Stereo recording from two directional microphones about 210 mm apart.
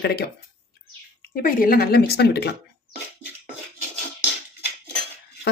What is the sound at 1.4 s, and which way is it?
Speech, 40° left (ahead or behind).